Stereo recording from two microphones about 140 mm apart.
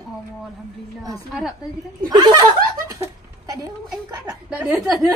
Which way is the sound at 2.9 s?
25° right (ahead or behind).